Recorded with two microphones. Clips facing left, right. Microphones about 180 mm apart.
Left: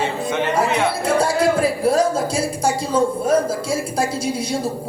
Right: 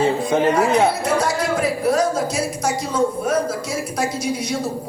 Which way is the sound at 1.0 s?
30° left (ahead or behind).